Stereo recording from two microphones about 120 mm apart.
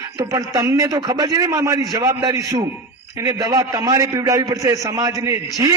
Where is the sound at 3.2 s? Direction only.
30° right (ahead or behind).